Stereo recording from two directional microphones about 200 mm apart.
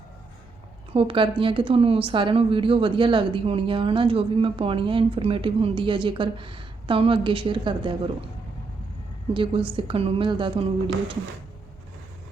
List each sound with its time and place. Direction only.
0.9 s speech: 25° right (ahead or behind)
9.3 s speech: 25° right (ahead or behind)